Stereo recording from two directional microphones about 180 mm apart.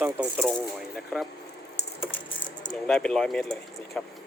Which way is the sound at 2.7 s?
5° left (ahead or behind).